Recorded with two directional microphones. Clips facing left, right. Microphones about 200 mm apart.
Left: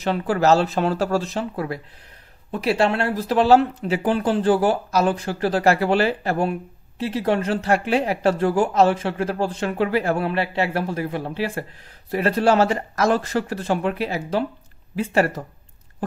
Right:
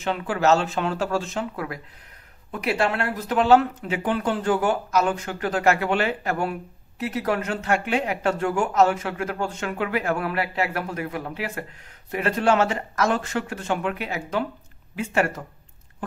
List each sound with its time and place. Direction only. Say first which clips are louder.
0.0 s speech: left 3 dB; 35° left (ahead or behind)